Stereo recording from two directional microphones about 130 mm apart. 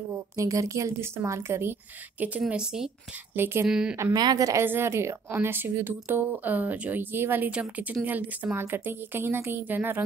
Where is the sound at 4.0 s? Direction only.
30° right (ahead or behind); by 10.0 s 15° right (ahead or behind).